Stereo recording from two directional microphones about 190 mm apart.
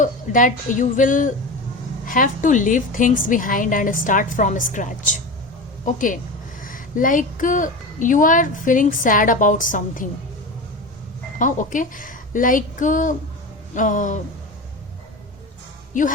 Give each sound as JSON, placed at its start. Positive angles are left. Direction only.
{"t": 0.0, "sound": "a woman's voice", "side_deg": 40}
{"t": 11.3, "sound": "a woman's voice", "side_deg": 45}
{"t": 13.7, "sound": "a sound", "side_deg": 40}